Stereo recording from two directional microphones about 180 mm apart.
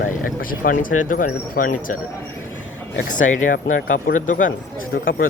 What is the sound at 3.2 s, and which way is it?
Speech, 50° left (ahead or behind).